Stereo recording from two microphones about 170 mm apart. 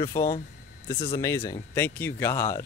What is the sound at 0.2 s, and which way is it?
Speech, 20° left (ahead or behind).